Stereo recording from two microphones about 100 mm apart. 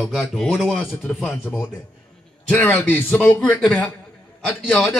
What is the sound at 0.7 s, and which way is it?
A man's voice, 15° left (ahead or behind).